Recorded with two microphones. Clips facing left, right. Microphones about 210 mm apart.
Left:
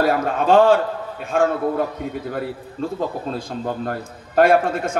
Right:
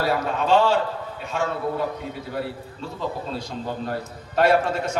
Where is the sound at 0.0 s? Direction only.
50° left (ahead or behind).